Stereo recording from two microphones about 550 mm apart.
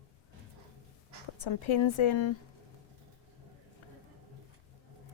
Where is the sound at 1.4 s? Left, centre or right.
Left.